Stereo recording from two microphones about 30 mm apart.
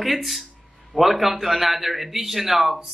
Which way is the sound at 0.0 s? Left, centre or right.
Centre.